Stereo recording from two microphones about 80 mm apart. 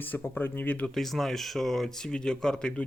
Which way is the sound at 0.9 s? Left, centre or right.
Centre.